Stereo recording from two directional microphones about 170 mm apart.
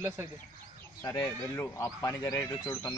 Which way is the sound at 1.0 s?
15° left (ahead or behind).